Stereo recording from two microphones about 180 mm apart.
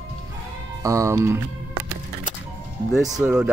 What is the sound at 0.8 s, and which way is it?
Speech, 15° right (ahead or behind).